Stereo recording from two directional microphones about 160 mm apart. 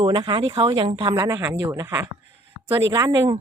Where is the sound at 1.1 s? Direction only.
20° right (ahead or behind).